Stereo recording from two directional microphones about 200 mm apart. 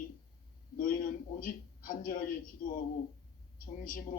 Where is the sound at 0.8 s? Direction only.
45° left (ahead or behind).